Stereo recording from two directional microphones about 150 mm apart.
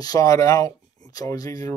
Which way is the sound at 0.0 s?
25° left (ahead or behind).